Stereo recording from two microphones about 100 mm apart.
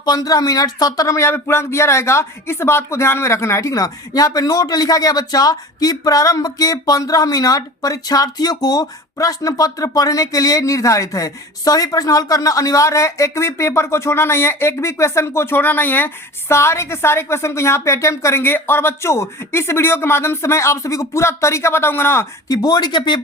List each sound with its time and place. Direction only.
0.0 s speech: 40° left (ahead or behind); by 22.3 s 25° left (ahead or behind)
22.4 s speech: 40° left (ahead or behind)